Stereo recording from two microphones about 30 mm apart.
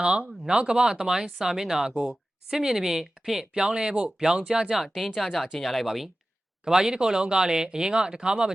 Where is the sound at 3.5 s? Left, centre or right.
Right.